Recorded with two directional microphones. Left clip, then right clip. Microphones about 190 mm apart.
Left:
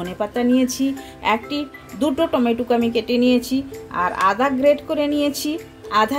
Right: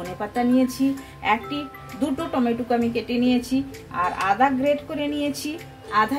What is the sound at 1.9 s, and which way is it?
A woman's voice, 50° left (ahead or behind).